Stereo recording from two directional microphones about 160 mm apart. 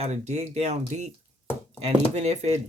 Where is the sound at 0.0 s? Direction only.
45° right (ahead or behind).